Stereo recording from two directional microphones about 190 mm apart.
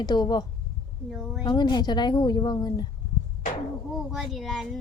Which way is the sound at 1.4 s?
20° left (ahead or behind).